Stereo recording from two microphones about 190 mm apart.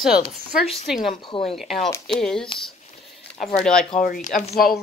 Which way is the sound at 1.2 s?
25° left (ahead or behind).